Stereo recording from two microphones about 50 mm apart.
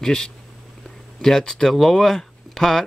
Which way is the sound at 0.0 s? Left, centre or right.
Centre.